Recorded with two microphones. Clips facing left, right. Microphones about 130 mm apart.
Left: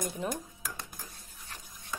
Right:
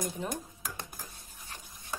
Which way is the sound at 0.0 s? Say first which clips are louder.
Left 1 dB; centre (ahead or behind).